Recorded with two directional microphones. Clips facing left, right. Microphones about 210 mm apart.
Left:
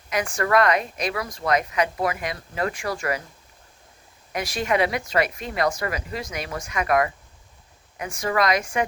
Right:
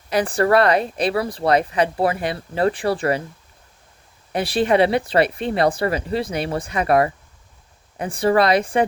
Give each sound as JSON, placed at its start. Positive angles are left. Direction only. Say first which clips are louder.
{"t": 0.1, "sound": "speech", "louder": "right 5 dB", "side_deg": -35}
{"t": 4.3, "sound": "speech", "louder": "right 6 dB", "side_deg": -30}